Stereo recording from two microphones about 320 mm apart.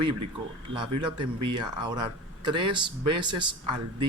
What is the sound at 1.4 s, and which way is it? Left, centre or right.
Speech, centre.